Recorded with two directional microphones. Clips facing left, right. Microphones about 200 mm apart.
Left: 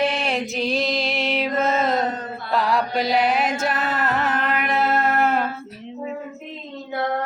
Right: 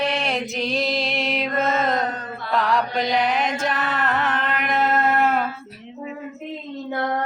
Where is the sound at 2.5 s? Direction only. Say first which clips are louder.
Even; 10° left (ahead or behind).